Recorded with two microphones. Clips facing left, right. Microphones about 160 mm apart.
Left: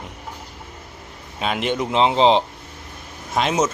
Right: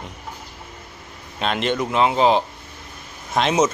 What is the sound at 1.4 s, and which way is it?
Speech, 10° left (ahead or behind).